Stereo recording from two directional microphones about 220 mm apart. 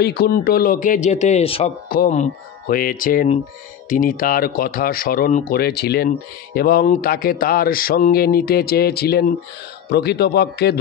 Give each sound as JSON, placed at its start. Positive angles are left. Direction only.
{"t": 0.0, "sound": "speech", "side_deg": 45}